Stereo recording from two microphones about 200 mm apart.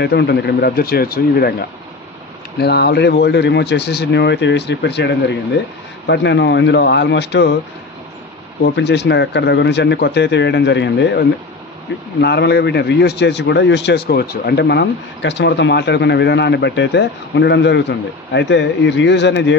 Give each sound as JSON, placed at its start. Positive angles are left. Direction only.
{"t": 0.0, "sound": "speech", "side_deg": 55}
{"t": 2.6, "sound": "a man's voice", "side_deg": 55}
{"t": 8.6, "sound": "a man's voice", "side_deg": 55}